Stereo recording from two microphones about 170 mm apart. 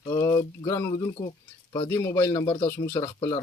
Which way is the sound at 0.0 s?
15° left (ahead or behind).